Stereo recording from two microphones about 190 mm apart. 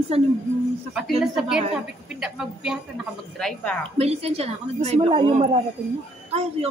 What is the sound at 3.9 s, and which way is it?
A woman's voice, 30° right (ahead or behind).